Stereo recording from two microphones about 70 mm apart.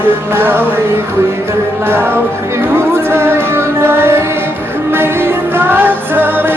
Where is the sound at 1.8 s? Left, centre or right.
Right.